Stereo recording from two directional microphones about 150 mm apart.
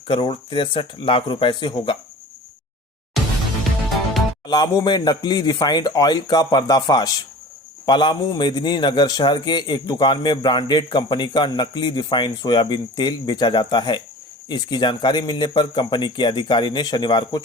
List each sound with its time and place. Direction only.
0.1 s speech: 35° left (ahead or behind)
4.4 s a man's voice: 25° left (ahead or behind)